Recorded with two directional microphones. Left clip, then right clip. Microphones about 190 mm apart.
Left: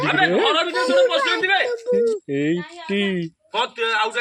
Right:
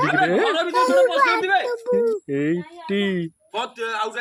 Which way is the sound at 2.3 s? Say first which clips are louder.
Left 1 dB; 5° left (ahead or behind).